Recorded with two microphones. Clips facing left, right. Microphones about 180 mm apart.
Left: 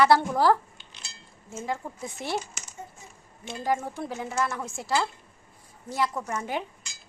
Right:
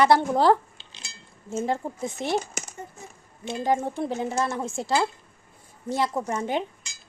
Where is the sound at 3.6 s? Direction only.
25° right (ahead or behind).